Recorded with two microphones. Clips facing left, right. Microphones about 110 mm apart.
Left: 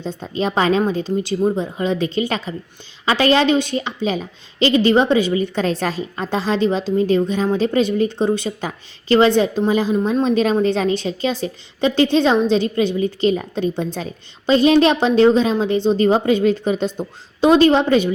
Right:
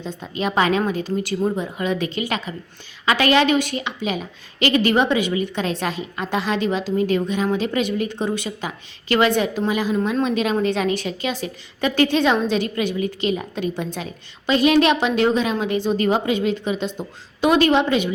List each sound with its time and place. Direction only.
0.2 s a woman's voice: 30° left (ahead or behind)
10.2 s a woman's voice: 35° left (ahead or behind)